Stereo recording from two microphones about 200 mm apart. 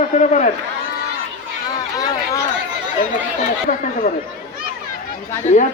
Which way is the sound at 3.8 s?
45° left (ahead or behind).